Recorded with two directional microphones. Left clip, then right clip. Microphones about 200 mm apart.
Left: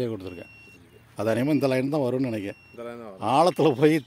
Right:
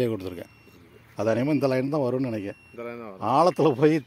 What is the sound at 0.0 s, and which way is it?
Speech, 15° right (ahead or behind).